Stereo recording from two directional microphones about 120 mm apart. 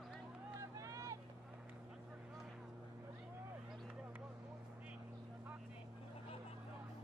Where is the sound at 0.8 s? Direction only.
30° right (ahead or behind).